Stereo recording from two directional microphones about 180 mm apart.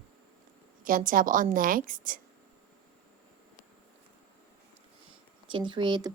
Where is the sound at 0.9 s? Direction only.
50° right (ahead or behind).